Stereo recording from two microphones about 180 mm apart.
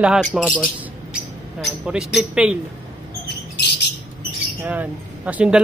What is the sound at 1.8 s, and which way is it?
Speech, 5° right (ahead or behind).